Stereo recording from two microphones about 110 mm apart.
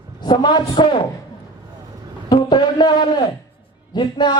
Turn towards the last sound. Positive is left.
turn(degrees=45)  # may be behind; listen again after turning